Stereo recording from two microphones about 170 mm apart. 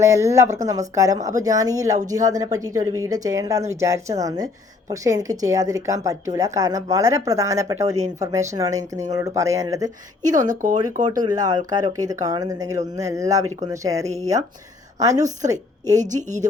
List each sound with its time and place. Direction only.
0.0 s a woman's voice: 15° right (ahead or behind)
10.3 s speech: 50° right (ahead or behind)
11.2 s a woman's voice: 20° right (ahead or behind)
16.0 s speech: 45° right (ahead or behind)